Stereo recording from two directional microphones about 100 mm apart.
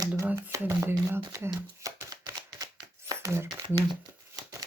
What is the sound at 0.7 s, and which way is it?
Speech, 25° right (ahead or behind).